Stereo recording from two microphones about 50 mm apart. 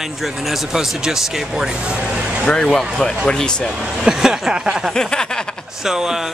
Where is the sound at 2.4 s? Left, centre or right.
Centre.